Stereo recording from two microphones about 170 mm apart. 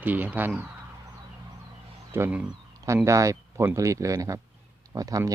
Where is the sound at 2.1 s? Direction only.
15° right (ahead or behind).